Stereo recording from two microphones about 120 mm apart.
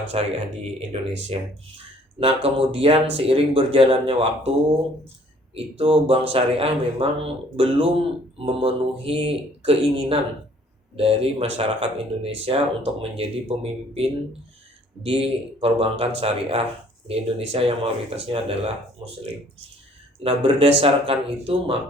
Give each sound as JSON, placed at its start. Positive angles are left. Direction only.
{"t": 0.1, "sound": "speech", "side_deg": -55}
{"t": 5.5, "sound": "speech", "side_deg": -50}
{"t": 20.2, "sound": "speech", "side_deg": -50}